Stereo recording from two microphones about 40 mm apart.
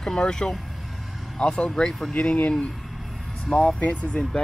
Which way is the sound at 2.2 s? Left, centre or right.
Left.